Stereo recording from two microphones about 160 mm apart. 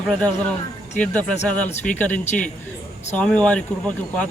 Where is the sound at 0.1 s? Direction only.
5° left (ahead or behind).